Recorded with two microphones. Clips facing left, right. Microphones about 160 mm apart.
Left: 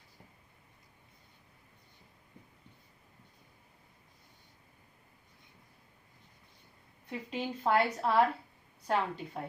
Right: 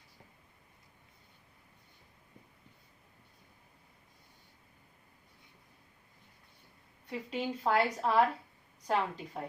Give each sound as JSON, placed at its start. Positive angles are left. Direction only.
{"t": 7.1, "sound": "a woman's voice", "side_deg": 0}